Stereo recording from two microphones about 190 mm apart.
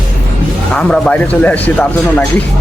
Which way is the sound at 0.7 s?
5° left (ahead or behind).